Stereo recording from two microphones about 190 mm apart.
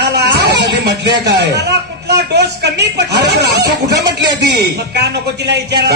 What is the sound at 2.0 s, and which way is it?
Speech, 60° right (ahead or behind).